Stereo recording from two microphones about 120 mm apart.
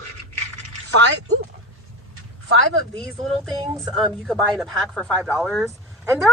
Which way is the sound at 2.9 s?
5° left (ahead or behind).